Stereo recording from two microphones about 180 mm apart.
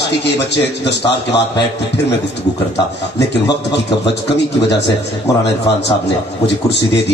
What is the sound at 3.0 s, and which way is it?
Speech, 70° left (ahead or behind).